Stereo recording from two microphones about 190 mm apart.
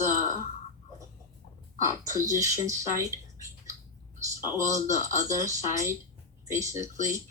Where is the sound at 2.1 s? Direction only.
15° right (ahead or behind).